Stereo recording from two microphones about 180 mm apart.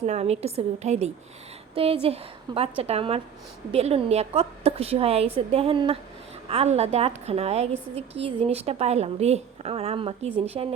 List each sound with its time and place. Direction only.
0.0 s a woman's voice: 35° right (ahead or behind)